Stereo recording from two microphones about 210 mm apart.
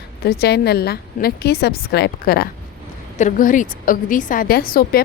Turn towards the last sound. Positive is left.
turn(degrees=45)  # may be behind; listen again after turning